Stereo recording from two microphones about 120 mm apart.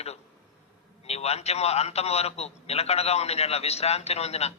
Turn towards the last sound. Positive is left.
turn(degrees=60)  # may be behind; listen again after turning